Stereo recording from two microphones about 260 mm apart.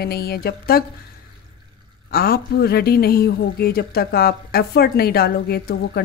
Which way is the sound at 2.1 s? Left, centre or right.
Left.